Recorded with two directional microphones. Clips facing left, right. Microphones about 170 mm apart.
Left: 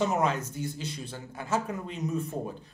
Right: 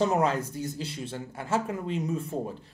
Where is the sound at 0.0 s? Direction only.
35° right (ahead or behind).